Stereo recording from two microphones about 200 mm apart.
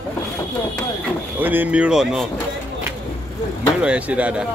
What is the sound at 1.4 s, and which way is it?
Speech, 10° right (ahead or behind).